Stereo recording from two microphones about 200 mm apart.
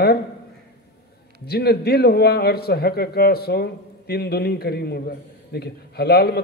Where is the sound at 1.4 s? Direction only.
50° left (ahead or behind).